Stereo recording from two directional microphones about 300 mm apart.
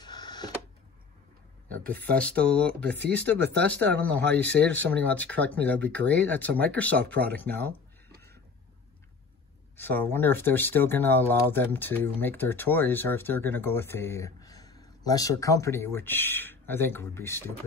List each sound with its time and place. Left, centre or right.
0.0 s a sound: centre
1.7 s speech: centre
2.8 s speech: right
3.1 s speech: centre
3.3 s speech: right
3.6 s speech: centre
9.8 s speech: centre